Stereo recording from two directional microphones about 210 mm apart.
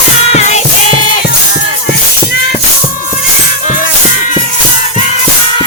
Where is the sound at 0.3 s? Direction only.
35° left (ahead or behind).